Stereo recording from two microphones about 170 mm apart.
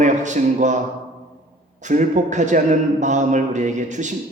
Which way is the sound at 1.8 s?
45° right (ahead or behind).